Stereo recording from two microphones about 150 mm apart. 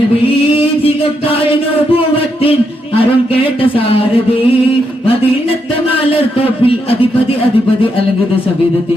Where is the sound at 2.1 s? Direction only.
40° left (ahead or behind).